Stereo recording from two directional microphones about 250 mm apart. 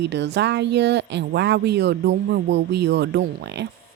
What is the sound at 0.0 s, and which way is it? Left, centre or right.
Speech, right.